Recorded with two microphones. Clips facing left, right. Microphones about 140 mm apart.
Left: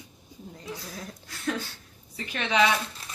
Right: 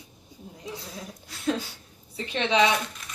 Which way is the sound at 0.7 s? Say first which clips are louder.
Right 1 dB; 20° right (ahead or behind).